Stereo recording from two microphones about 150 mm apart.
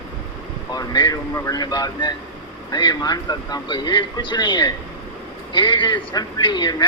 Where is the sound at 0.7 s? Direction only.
30° left (ahead or behind).